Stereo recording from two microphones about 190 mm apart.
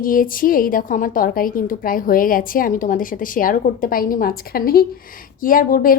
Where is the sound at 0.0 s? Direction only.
45° left (ahead or behind).